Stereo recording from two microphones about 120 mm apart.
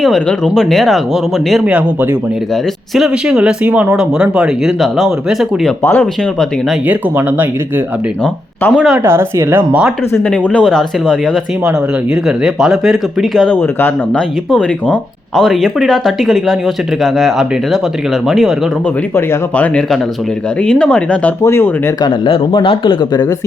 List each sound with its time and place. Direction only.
0.0 s speech: 5° left (ahead or behind)
1.6 s speech: 10° right (ahead or behind)
5.8 s speech: 15° left (ahead or behind)
6.8 s speech: 15° right (ahead or behind)
8.2 s speech: 10° left (ahead or behind)
9.0 s speech: 20° right (ahead or behind)
10.2 s speech: 10° left (ahead or behind)
12.4 s speech: 5° right (ahead or behind)
13.5 s speech: 15° left (ahead or behind)
15.4 s speech: centre (ahead or behind)
19.1 s speech: 20° left (ahead or behind)
20.6 s speech: 10° left (ahead or behind)
21.4 s speech: 20° left (ahead or behind)
22.0 s speech: 45° left (ahead or behind)